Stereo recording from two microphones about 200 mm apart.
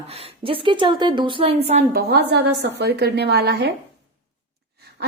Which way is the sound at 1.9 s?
55° right (ahead or behind).